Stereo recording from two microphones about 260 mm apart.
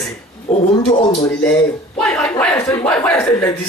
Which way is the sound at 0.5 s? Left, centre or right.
Left.